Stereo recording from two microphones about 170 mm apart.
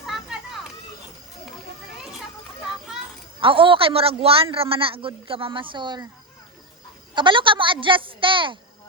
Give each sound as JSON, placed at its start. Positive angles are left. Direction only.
{"t": 0.0, "sound": "children playing", "side_deg": -5}
{"t": 3.4, "sound": "a man's voice", "side_deg": -30}
{"t": 7.1, "sound": "speech", "side_deg": -30}